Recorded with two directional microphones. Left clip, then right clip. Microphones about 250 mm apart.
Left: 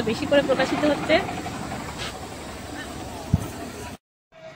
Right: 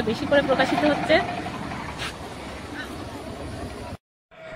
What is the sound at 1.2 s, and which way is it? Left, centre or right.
Vehicle, right.